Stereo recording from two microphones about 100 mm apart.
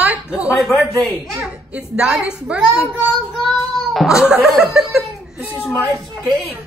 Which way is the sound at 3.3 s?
Centre (ahead or behind).